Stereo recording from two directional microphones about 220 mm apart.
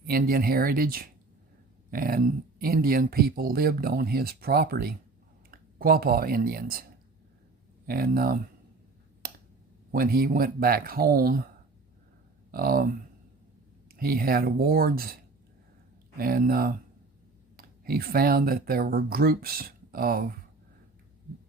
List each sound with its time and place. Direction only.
0.1 s speech: 40° right (ahead or behind)
7.9 s speech: 40° right (ahead or behind)
9.2 s finger snapping: 40° right (ahead or behind)
9.9 s speech: 40° right (ahead or behind)
12.5 s speech: 40° right (ahead or behind)